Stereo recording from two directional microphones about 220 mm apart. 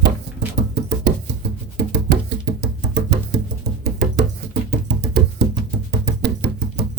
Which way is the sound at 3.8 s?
50° right (ahead or behind).